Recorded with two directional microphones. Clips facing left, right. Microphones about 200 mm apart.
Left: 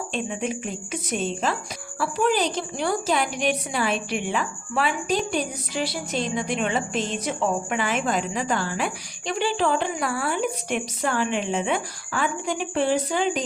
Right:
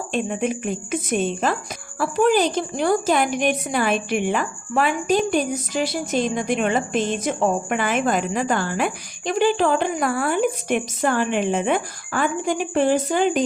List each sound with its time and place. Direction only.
0.1 s a woman's voice: 50° right (ahead or behind)